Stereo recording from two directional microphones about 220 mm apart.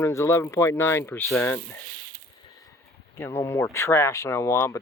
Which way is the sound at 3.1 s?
10° left (ahead or behind).